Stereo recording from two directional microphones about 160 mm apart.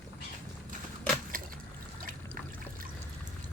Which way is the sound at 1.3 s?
60° right (ahead or behind).